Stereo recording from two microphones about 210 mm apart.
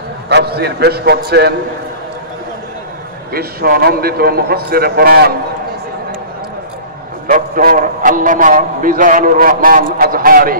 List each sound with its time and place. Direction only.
0.3 s a man's voice: 50° right (ahead or behind)
3.3 s a man's voice: 45° right (ahead or behind)
7.2 s a man's voice: 40° right (ahead or behind)